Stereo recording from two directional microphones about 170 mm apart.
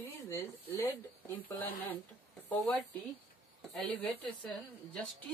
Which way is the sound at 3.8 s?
10° left (ahead or behind).